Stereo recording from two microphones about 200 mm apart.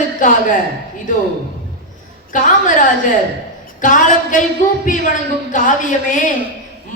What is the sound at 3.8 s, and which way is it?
A man's voice, 40° left (ahead or behind).